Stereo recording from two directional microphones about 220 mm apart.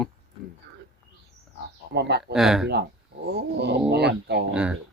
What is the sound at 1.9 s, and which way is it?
Speech, 50° right (ahead or behind).